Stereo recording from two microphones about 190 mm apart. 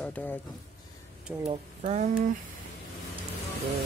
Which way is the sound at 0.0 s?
10° left (ahead or behind).